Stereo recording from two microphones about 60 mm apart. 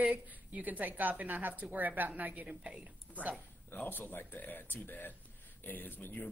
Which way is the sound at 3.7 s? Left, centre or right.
Left.